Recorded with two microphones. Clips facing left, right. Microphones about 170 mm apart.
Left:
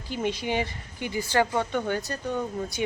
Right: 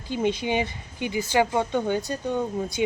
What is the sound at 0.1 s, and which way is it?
Speech, 20° right (ahead or behind).